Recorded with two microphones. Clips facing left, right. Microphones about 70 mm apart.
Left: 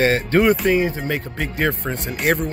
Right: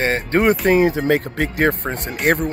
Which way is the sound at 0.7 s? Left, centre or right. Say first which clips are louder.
Right 5 dB; right.